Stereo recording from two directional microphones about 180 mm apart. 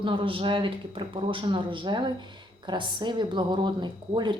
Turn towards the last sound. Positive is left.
turn(degrees=-25)  # may be behind; listen again after turning